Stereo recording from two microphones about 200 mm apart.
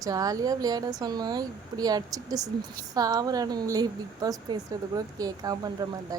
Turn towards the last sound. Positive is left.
turn(degrees=-20)  # may be behind; listen again after turning